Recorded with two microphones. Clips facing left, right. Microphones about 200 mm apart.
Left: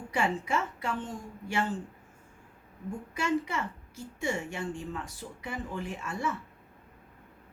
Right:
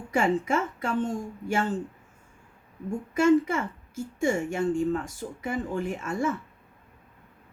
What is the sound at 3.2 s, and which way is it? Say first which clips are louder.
A woman's voice: right 10 dB; 45° right (ahead or behind).